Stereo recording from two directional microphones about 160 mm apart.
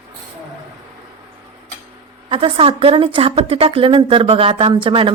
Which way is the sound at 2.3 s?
35° right (ahead or behind).